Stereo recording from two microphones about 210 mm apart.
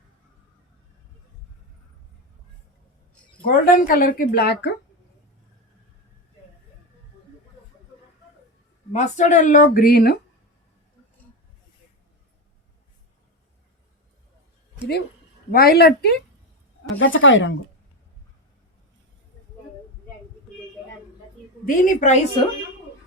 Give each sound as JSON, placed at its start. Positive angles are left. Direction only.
{"t": 3.4, "sound": "speech", "side_deg": 45}
{"t": 8.9, "sound": "speech", "side_deg": 35}
{"t": 15.5, "sound": "speech", "side_deg": 45}
{"t": 17.0, "sound": "speech", "side_deg": 65}
{"t": 21.7, "sound": "speech", "side_deg": 40}